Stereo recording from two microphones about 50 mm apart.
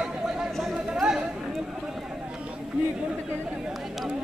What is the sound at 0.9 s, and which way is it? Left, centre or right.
Chatter, centre.